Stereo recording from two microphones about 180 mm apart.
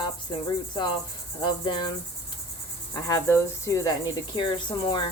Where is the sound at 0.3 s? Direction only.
25° left (ahead or behind).